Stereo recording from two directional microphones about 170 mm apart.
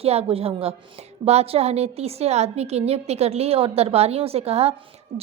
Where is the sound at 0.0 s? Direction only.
35° right (ahead or behind).